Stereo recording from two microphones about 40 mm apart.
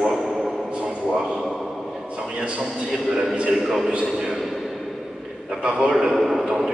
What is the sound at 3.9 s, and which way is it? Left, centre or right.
Speech, right.